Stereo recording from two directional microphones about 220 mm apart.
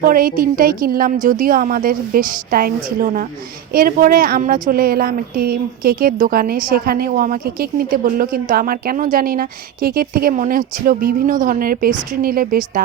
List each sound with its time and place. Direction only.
0.0 s speech: 40° right (ahead or behind)